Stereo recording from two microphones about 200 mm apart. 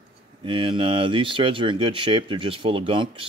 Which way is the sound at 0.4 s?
25° right (ahead or behind).